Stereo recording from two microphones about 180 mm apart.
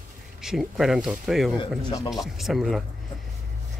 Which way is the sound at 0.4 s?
Centre (ahead or behind).